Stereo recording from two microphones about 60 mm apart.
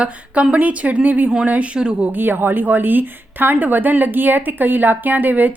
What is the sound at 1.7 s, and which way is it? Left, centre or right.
Speech, centre.